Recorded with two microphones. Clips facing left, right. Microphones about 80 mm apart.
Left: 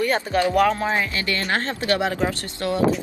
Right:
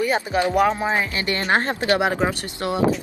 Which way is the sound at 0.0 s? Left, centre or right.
Centre.